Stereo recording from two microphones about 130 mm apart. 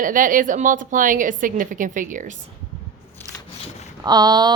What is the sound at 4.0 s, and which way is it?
Speech, 30° right (ahead or behind).